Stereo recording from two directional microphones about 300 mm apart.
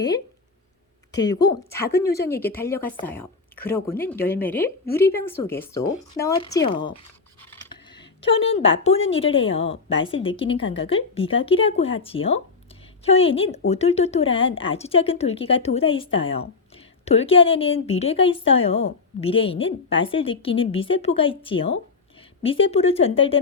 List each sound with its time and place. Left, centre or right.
1.1 s speech: centre
7.5 s a sound: centre
9.2 s a woman's voice: centre